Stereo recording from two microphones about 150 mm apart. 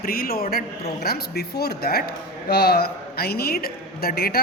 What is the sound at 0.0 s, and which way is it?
Speech, 80° left.